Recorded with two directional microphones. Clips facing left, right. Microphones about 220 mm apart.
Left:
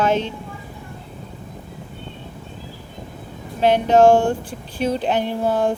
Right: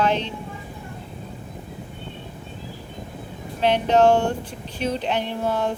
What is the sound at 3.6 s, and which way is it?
Speech, 45° left (ahead or behind).